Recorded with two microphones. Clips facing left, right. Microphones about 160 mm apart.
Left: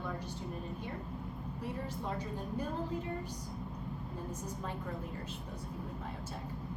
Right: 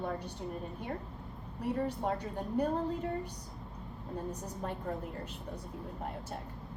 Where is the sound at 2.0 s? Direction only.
65° right (ahead or behind).